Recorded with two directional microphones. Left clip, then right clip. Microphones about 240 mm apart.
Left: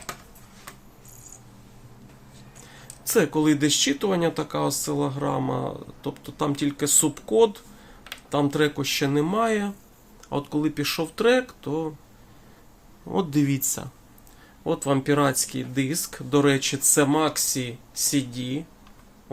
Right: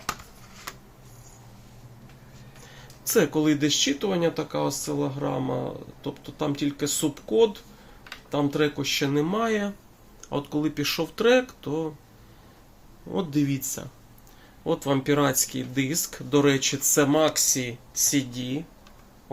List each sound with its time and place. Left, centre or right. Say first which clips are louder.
2.6 s speech: even; centre
13.1 s speech: left 2 dB; left
14.6 s speech: left 1 dB; centre